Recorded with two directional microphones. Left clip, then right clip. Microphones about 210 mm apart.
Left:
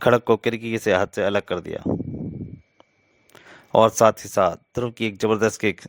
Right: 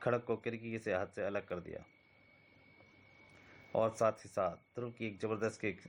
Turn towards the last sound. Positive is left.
turn(degrees=50)  # may be behind; listen again after turning